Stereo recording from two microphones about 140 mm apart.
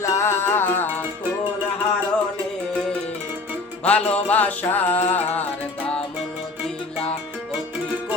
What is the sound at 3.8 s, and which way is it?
Music, 10° left (ahead or behind).